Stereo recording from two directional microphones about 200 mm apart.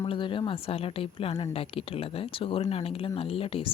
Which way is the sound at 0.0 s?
25° left (ahead or behind).